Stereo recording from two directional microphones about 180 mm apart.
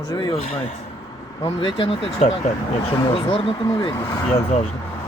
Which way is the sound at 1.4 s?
30° left (ahead or behind).